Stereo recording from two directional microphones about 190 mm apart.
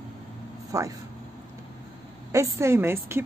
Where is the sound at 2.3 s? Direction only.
15° right (ahead or behind).